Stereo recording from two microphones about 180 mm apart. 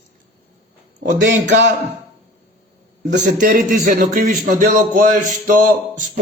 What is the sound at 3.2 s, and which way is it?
Speech, 50° right (ahead or behind).